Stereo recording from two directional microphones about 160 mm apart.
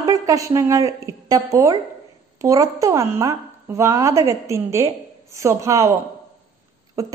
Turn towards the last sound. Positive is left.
turn(degrees=-20)  # may be behind; listen again after turning